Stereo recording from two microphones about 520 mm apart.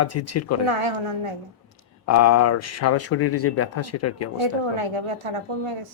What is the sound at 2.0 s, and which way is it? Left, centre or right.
Speech, left.